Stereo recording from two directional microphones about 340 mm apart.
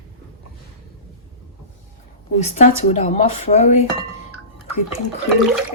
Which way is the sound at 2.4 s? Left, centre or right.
Centre.